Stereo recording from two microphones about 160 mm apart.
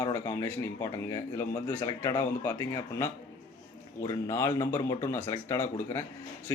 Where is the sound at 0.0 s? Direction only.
20° left (ahead or behind).